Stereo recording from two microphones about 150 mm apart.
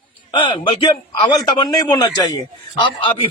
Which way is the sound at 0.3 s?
35° left (ahead or behind).